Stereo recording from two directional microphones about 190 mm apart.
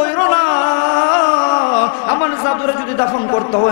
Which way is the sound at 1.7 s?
15° left (ahead or behind).